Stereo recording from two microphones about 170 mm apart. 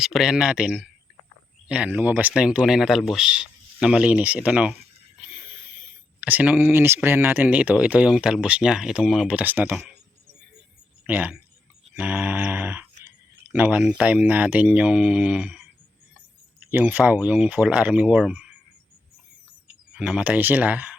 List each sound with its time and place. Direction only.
0.0 s speech: centre (ahead or behind)
6.1 s speech: 10° right (ahead or behind)
11.0 s speech: 10° right (ahead or behind)
16.7 s speech: 10° right (ahead or behind)
20.0 s speech: 5° right (ahead or behind)